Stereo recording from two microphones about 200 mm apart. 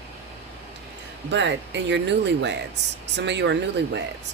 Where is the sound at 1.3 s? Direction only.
60° right (ahead or behind).